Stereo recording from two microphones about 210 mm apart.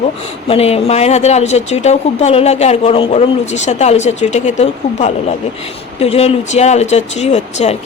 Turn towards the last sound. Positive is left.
turn(degrees=30)  # may be behind; listen again after turning